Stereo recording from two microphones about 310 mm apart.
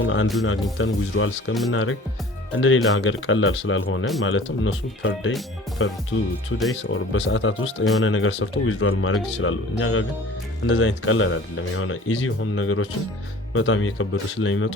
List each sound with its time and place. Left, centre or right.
0.0 s speech: left